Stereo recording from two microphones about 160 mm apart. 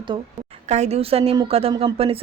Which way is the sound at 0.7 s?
45° right (ahead or behind).